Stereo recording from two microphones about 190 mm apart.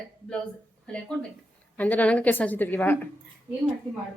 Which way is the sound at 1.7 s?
10° left (ahead or behind).